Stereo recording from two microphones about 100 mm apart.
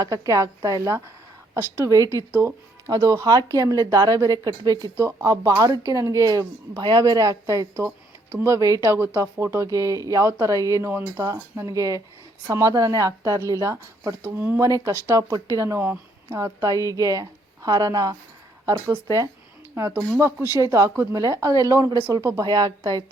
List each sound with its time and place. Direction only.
0.0 s speech: 35° right (ahead or behind)
11.7 s speech: 35° right (ahead or behind)
14.8 s speech: 35° right (ahead or behind)
19.9 s speech: 25° right (ahead or behind)